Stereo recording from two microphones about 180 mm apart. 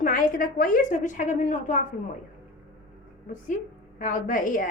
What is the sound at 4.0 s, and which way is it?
Speech, 45° left (ahead or behind).